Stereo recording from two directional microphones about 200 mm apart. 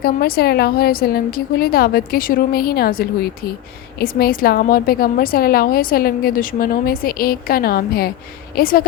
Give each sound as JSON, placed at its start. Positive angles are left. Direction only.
{"t": 0.0, "sound": "a woman's voice", "side_deg": 50}